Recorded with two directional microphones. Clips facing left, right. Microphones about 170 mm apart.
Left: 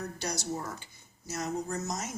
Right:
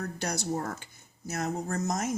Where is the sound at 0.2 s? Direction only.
55° right (ahead or behind).